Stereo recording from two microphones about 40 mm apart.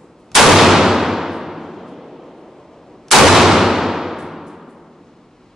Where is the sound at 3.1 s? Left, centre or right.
Centre.